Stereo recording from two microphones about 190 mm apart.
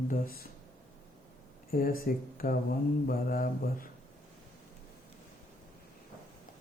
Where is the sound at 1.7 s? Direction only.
50° left (ahead or behind).